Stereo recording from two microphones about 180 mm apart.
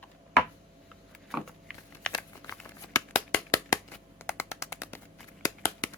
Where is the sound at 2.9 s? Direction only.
15° left (ahead or behind).